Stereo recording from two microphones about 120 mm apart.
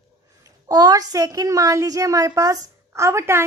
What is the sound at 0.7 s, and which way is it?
A woman's voice, 35° right (ahead or behind).